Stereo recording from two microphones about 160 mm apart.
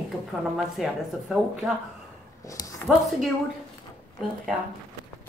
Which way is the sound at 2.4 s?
20° left (ahead or behind).